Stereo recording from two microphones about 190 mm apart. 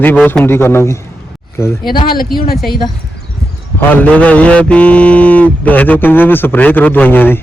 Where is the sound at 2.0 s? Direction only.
50° left (ahead or behind).